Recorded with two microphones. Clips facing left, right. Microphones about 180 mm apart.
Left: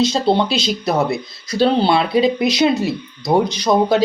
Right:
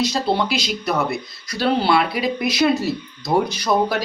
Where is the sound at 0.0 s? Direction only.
25° left (ahead or behind).